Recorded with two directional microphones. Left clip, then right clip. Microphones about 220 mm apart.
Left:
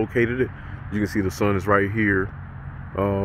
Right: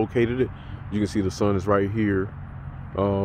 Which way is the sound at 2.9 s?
Centre (ahead or behind).